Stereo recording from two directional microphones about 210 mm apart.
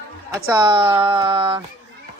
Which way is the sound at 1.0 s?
25° right (ahead or behind).